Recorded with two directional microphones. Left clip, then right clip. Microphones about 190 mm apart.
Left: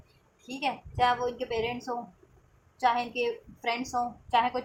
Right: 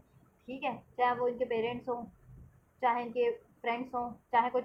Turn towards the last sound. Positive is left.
turn(degrees=25)  # may be behind; listen again after turning